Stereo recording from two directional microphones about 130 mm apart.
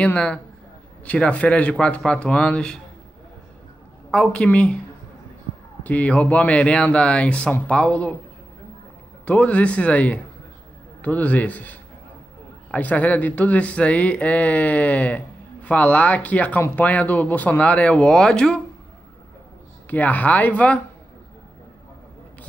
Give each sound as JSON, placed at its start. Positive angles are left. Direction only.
{"t": 0.0, "sound": "speech", "side_deg": 10}
{"t": 4.1, "sound": "speech", "side_deg": 5}
{"t": 5.9, "sound": "speech", "side_deg": 10}
{"t": 9.2, "sound": "speech", "side_deg": 10}
{"t": 19.9, "sound": "speech", "side_deg": 10}